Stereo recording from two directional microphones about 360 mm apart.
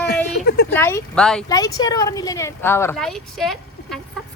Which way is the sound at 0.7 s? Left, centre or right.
Centre.